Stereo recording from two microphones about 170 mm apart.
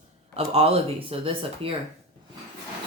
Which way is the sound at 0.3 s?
35° right (ahead or behind).